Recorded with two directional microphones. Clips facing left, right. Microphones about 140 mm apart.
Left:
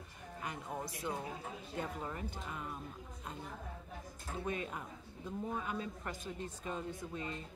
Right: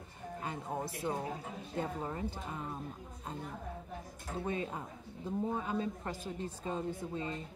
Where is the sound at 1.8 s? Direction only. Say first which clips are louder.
Right 4 dB; 25° right (ahead or behind).